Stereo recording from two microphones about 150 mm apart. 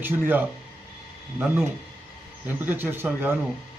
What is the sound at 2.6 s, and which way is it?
Speech, 15° right (ahead or behind).